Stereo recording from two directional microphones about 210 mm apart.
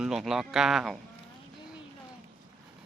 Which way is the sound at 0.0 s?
Centre (ahead or behind).